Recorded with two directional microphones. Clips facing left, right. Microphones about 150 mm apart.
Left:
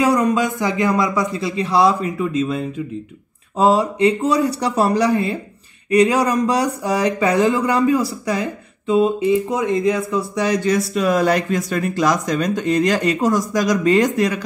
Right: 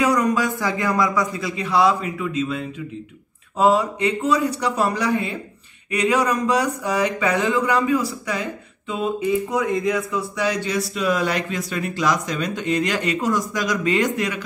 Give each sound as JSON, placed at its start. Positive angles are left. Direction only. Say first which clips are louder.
{"t": 0.0, "sound": "a man's voice", "louder": "left 3 dB", "side_deg": 25}